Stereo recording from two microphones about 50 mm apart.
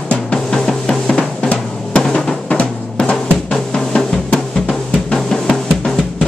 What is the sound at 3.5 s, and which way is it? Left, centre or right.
Drum, centre.